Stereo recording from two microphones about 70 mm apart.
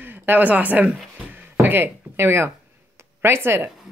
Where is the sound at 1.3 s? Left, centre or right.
Right.